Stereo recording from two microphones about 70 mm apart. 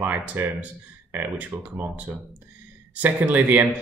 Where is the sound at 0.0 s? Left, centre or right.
Right.